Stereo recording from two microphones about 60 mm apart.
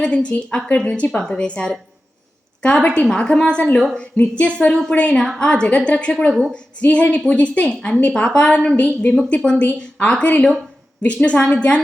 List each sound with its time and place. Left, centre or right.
0.0 s a woman's voice: centre
1.2 s a woman's voice: centre